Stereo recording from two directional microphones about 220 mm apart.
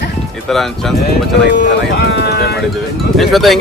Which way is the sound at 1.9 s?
45° left (ahead or behind).